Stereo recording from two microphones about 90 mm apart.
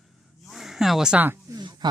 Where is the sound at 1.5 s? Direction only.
55° right (ahead or behind).